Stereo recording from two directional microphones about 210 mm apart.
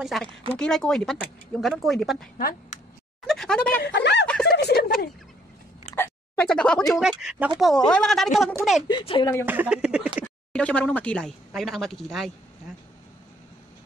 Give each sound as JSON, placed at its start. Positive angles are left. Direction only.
{"t": 0.0, "sound": "speech", "side_deg": 0}
{"t": 3.3, "sound": "speech", "side_deg": 5}
{"t": 3.8, "sound": "speech", "side_deg": 55}
{"t": 4.6, "sound": "a sound", "side_deg": 50}
{"t": 5.9, "sound": "a sound", "side_deg": 5}
{"t": 6.9, "sound": "speech", "side_deg": -5}
{"t": 8.8, "sound": "speech", "side_deg": 20}
{"t": 9.5, "sound": "speech", "side_deg": -5}